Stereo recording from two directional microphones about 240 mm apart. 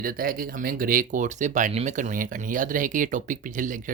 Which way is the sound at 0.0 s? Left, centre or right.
Right.